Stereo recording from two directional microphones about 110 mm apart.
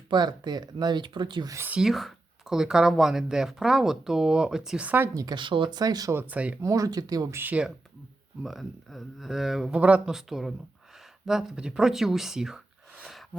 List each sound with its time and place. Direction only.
0.1 s speech: 40° right (ahead or behind)
1.5 s speech: 15° right (ahead or behind)
1.8 s speech: centre (ahead or behind); by 5.1 s 15° right (ahead or behind)
5.1 s speech: 40° right (ahead or behind)
6.1 s speech: 15° right (ahead or behind)
6.6 s speech: 30° right (ahead or behind)
7.3 s speech: 15° right (ahead or behind)
8.4 s speech: centre (ahead or behind)